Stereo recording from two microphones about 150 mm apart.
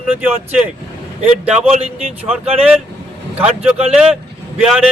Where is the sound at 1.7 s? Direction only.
45° right (ahead or behind).